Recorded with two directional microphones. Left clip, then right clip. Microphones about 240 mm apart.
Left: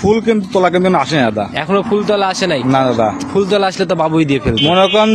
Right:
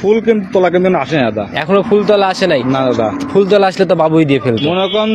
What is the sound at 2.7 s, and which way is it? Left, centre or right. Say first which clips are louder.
Speech: left 1 dB; left.